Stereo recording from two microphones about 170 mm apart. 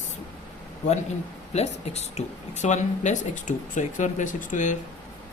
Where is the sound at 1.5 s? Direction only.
40° left (ahead or behind).